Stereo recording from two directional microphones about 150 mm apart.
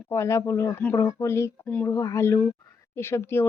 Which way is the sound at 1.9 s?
20° left (ahead or behind).